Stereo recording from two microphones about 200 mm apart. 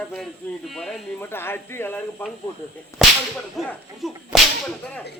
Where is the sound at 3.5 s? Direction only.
Centre (ahead or behind).